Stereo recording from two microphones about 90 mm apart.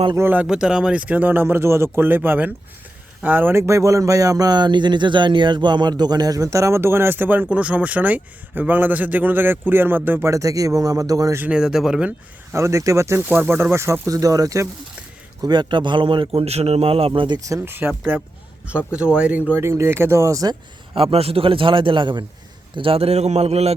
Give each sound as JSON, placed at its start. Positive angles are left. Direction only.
{"t": 0.2, "sound": "speech", "side_deg": -20}
{"t": 0.4, "sound": "speech", "side_deg": -10}
{"t": 10.2, "sound": "speech", "side_deg": -40}
{"t": 11.5, "sound": "speech", "side_deg": -5}
{"t": 12.5, "sound": "speech", "side_deg": -35}
{"t": 13.2, "sound": "speech", "side_deg": -20}
{"t": 14.1, "sound": "speech", "side_deg": -40}
{"t": 15.4, "sound": "a man's voice", "side_deg": -55}
{"t": 17.7, "sound": "speech", "side_deg": -20}
{"t": 19.5, "sound": "speech", "side_deg": -30}
{"t": 20.9, "sound": "a man's voice", "side_deg": -90}
{"t": 22.7, "sound": "a man's voice", "side_deg": -85}